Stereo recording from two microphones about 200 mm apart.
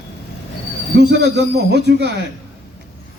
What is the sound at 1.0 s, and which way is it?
Speech, 60° right (ahead or behind).